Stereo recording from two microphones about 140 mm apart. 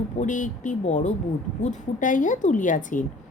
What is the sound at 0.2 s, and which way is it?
A woman's voice, 65° left (ahead or behind).